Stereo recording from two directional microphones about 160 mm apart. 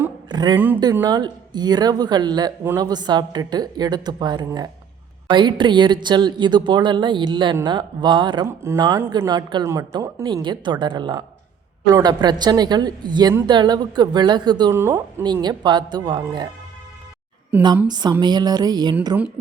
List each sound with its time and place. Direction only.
0.3 s a sound: 25° right (ahead or behind)
0.5 s speech: 10° right (ahead or behind)
1.0 s a woman's voice: 25° right (ahead or behind)
8.4 s a woman's voice: 15° right (ahead or behind)
14.7 s speech: 15° right (ahead or behind)
15.2 s a woman's voice: 25° right (ahead or behind)
17.5 s speech: 10° right (ahead or behind)
17.8 s a woman's voice: 25° right (ahead or behind)